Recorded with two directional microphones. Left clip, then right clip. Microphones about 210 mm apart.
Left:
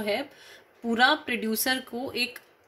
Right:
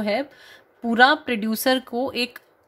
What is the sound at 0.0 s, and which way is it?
Speech, 50° right (ahead or behind).